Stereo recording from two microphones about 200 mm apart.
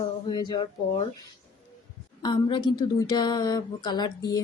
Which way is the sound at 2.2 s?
20° left (ahead or behind).